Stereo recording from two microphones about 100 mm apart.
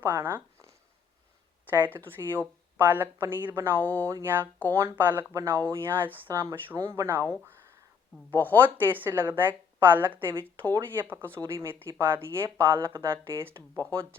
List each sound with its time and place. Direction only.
0.0 s speech: 25° right (ahead or behind)
5.3 s speech: 30° right (ahead or behind)
8.5 s speech: 20° right (ahead or behind)